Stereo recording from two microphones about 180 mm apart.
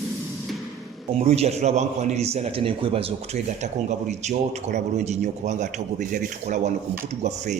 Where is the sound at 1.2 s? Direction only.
35° right (ahead or behind).